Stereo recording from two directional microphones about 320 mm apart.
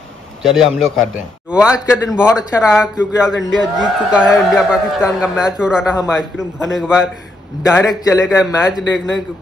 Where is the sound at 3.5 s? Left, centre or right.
Centre.